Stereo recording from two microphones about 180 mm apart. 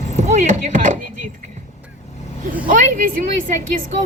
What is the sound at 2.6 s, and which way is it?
Speech, 45° right (ahead or behind).